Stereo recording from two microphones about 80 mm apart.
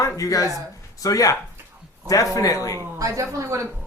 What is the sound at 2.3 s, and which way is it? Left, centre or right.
Speech, left.